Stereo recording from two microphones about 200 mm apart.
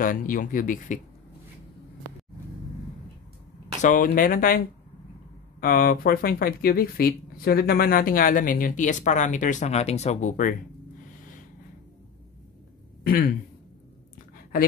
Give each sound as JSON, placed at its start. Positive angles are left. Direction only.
{"t": 0.0, "sound": "speech", "side_deg": 45}
{"t": 3.8, "sound": "speech", "side_deg": 45}
{"t": 5.6, "sound": "speech", "side_deg": 45}
{"t": 13.0, "sound": "speech", "side_deg": 45}